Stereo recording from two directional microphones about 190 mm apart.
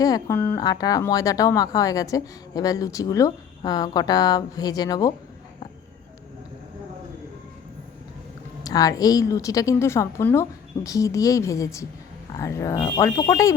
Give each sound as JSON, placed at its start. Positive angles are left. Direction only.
{"t": 0.0, "sound": "speech", "side_deg": 15}
{"t": 8.6, "sound": "a woman's voice", "side_deg": 20}